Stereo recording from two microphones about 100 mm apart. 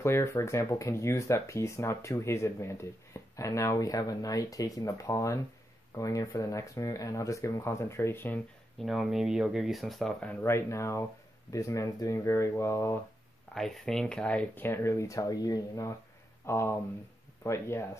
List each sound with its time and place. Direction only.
0.0 s speech: 25° left (ahead or behind)
8.7 s speech: centre (ahead or behind)
10.2 s speech: 25° left (ahead or behind)
13.6 s speech: 5° left (ahead or behind); by 15.9 s 40° left (ahead or behind)
16.4 s speech: 25° left (ahead or behind)